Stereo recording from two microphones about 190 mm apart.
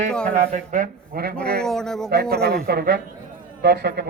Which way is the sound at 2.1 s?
55° right (ahead or behind).